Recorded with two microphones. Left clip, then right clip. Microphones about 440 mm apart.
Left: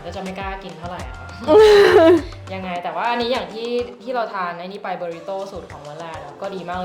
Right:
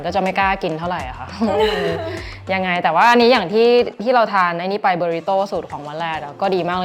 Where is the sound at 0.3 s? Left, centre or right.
Right.